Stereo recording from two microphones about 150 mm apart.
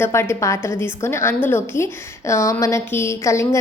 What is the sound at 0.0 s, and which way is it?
A woman's voice, 15° left (ahead or behind).